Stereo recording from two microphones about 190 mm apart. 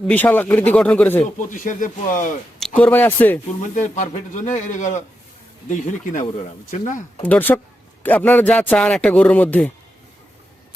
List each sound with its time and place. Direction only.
0.1 s a man's voice: 10° left (ahead or behind)
1.5 s speech: 45° left (ahead or behind)
2.6 s a man's voice: 5° left (ahead or behind)
3.8 s a man's voice: 40° left (ahead or behind)
7.2 s a man's voice: 10° left (ahead or behind)